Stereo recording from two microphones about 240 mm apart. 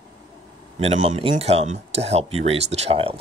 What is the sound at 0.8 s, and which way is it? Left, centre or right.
Speech, right.